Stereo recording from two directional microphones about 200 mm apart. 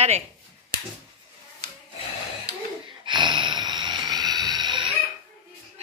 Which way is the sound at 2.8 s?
25° right (ahead or behind).